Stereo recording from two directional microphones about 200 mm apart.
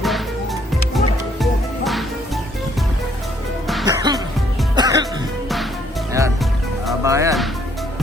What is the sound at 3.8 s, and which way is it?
Music, 20° right (ahead or behind).